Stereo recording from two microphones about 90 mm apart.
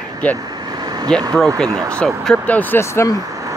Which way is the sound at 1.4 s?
45° right (ahead or behind).